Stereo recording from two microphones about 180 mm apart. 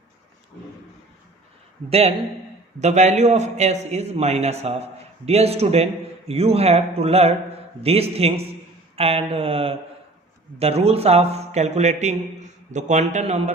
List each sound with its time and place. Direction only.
1.9 s a man's voice: 35° right (ahead or behind)